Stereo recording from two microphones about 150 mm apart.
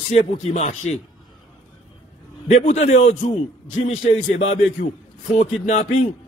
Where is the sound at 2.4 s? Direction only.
50° left (ahead or behind).